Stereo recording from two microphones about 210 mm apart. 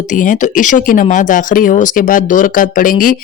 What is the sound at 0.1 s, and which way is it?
Speech, 35° left (ahead or behind).